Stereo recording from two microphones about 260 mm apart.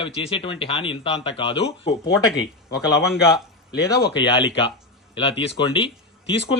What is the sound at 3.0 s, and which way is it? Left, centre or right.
Speech, centre.